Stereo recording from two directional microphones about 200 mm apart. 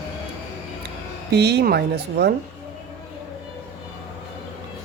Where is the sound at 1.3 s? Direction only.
55° right (ahead or behind).